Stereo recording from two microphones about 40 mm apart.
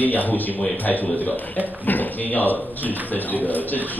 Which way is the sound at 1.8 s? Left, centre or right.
Left.